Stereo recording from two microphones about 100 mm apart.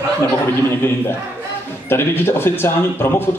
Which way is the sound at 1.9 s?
25° left (ahead or behind).